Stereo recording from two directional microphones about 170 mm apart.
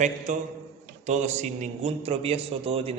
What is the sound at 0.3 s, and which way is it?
A man's voice, 45° right (ahead or behind).